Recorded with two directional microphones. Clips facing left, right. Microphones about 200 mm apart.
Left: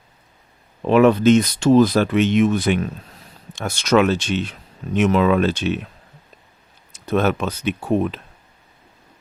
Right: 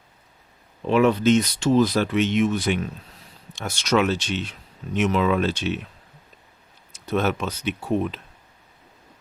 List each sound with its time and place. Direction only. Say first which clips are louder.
0.9 s speech: left 5 dB; 60° left (ahead or behind)
7.1 s speech: left 4 dB; 55° left (ahead or behind)